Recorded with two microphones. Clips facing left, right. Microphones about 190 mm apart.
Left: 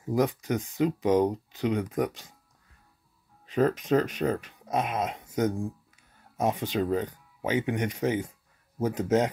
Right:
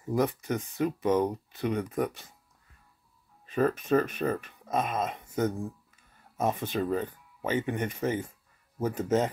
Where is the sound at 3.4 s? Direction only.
15° left (ahead or behind).